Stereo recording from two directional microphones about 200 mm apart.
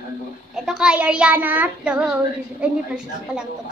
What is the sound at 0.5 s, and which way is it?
Child singing, centre (ahead or behind).